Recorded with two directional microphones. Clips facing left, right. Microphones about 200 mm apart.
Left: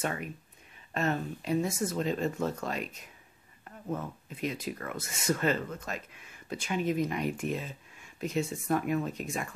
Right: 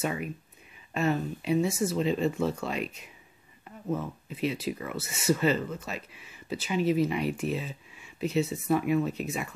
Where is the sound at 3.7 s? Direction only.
10° right (ahead or behind).